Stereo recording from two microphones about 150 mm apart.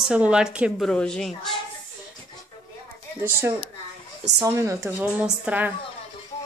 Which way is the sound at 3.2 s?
15° right (ahead or behind).